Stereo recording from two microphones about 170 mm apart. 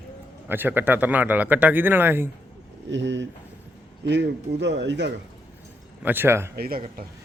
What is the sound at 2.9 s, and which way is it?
Speech, 90° right.